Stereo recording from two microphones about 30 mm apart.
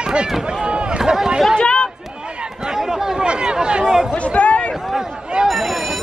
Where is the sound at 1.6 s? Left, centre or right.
Left.